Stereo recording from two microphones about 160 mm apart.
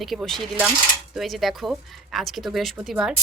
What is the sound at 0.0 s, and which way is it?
A woman's voice, centre (ahead or behind).